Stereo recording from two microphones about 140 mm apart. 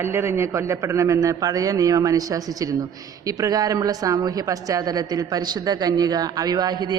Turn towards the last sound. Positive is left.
turn(degrees=-30)  # may be behind; listen again after turning